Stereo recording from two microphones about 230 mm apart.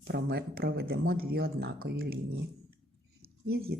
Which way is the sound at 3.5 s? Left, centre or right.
Right.